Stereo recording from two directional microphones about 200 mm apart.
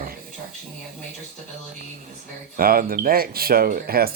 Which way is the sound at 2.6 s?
50° right (ahead or behind).